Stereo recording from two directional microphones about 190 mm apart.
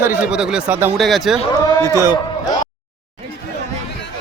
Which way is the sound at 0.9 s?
Centre (ahead or behind).